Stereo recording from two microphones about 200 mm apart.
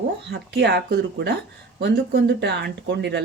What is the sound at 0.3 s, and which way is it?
Speech, 60° right (ahead or behind).